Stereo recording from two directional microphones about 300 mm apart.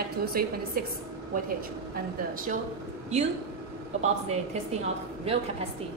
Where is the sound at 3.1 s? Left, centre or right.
Right.